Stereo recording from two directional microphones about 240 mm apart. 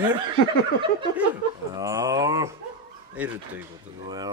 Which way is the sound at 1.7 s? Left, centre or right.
Centre.